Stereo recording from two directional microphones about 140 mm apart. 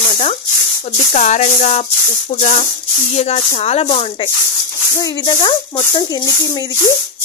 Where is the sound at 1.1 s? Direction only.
60° left (ahead or behind); by 4.3 s 45° left (ahead or behind).